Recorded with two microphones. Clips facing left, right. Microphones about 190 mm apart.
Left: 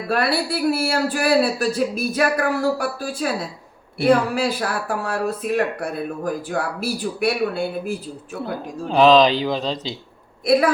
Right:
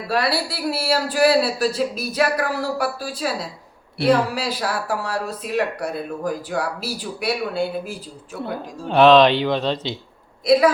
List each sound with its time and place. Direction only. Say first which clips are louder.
0.1 s speech: left 1 dB; 50° left (ahead or behind)
8.9 s speech: right 1 dB; centre (ahead or behind)